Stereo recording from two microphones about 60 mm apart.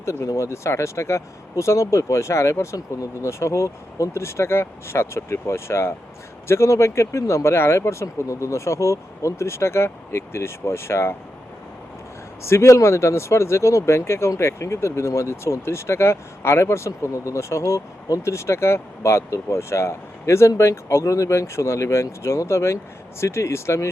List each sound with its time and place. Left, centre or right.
0.0 s speech: left
2.7 s speech: left
3.2 s speech: left
8.0 s speech: left
12.4 s speech: left